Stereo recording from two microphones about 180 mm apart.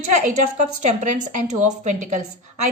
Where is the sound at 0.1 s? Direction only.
45° right (ahead or behind).